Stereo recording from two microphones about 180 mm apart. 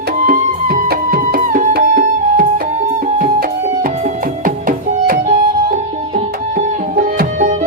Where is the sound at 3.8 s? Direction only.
45° right (ahead or behind).